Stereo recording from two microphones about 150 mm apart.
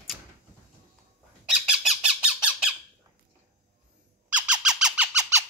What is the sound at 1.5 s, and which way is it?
Squeak, 5° right (ahead or behind).